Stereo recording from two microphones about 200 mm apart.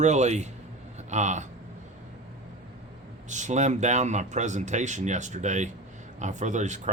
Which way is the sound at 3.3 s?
35° right (ahead or behind).